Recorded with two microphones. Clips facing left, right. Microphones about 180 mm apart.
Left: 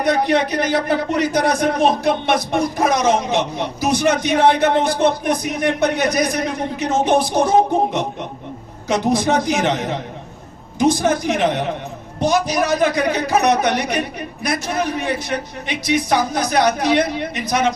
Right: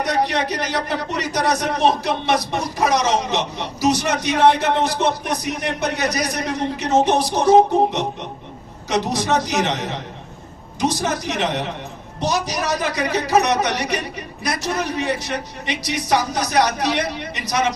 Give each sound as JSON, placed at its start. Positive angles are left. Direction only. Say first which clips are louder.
{"t": 0.0, "sound": "speech", "louder": "left 4 dB", "side_deg": 55}
{"t": 8.9, "sound": "a man's voice", "louder": "left 3 dB", "side_deg": 55}